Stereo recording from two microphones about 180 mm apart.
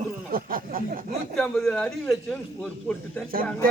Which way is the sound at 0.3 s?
55° right (ahead or behind).